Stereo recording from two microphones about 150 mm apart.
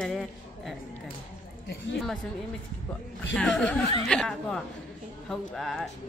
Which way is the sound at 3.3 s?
5° left (ahead or behind).